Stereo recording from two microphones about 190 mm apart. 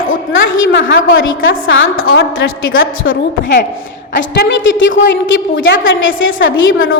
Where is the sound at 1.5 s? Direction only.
90° left.